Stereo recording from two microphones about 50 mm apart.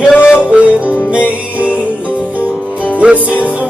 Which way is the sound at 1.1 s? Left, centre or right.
Right.